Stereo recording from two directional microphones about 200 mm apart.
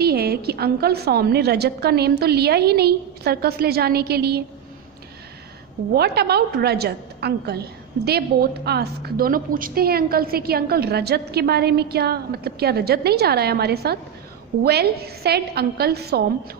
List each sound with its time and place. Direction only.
0.0 s a woman's voice: 50° right (ahead or behind)
5.9 s a woman's voice: 55° right (ahead or behind)